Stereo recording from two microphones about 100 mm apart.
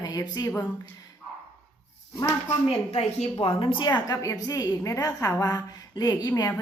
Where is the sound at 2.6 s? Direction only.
90° left.